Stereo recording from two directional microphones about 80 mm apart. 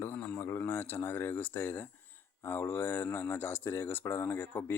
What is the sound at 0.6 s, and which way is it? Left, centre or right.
Speech, left.